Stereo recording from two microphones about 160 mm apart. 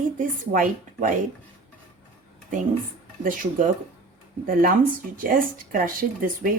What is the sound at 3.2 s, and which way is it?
Speech, 60° right (ahead or behind).